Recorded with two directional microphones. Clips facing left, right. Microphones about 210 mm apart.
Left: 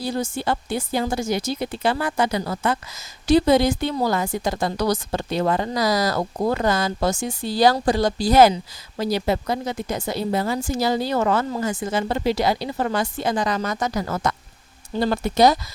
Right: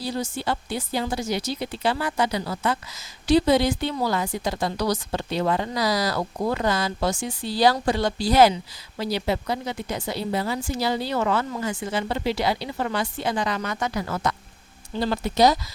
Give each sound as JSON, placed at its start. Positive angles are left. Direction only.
{"t": 0.0, "sound": "a woman's voice", "side_deg": 50}